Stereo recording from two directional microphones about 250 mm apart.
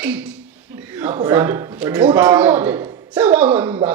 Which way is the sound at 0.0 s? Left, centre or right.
Centre.